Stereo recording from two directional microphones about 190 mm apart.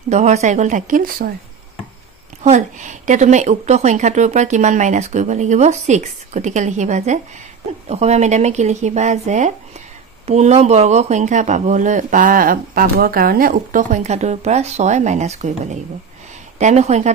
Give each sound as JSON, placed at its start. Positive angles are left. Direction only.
{"t": 0.1, "sound": "speech", "side_deg": -35}
{"t": 2.4, "sound": "speech", "side_deg": -40}